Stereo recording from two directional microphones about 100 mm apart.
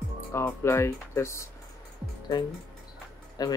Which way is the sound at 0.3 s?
25° left (ahead or behind).